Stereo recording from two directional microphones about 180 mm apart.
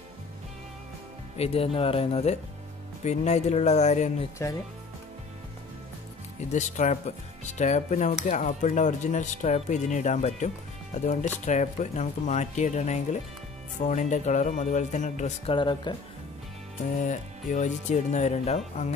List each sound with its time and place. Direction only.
1.4 s speech: 35° left (ahead or behind)
6.5 s speech: 40° left (ahead or behind)
15.5 s speech: 25° left (ahead or behind)
17.0 s speech: 45° left (ahead or behind)